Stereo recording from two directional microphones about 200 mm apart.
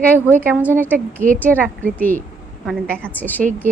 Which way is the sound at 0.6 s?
10° right (ahead or behind).